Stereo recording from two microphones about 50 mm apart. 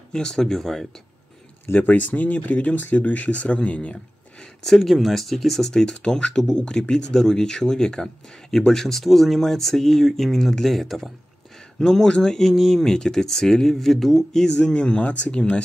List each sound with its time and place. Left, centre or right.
0.1 s speech: centre
1.7 s speech: left
4.6 s speech: centre
11.8 s speech: centre
14.6 s speech: left